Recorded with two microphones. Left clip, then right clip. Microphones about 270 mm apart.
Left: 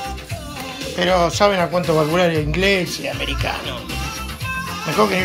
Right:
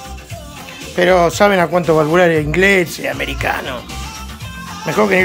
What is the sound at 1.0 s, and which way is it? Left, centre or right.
Speech, right.